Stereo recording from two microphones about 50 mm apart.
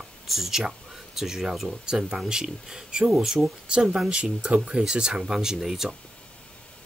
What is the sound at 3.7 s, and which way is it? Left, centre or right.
Speech, centre.